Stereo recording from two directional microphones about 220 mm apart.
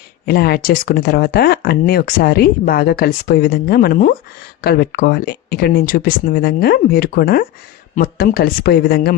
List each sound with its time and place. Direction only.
0.3 s speech: 45° left (ahead or behind)